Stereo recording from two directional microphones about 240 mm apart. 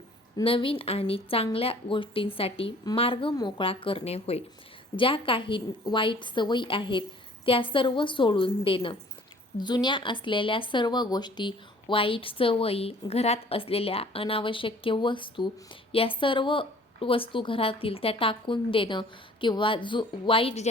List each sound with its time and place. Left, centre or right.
0.3 s speech: left